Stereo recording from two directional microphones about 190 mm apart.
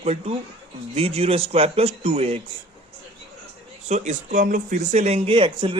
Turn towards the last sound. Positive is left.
turn(degrees=-25)  # may be behind; listen again after turning